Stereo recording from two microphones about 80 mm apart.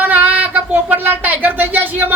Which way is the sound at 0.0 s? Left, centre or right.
Right.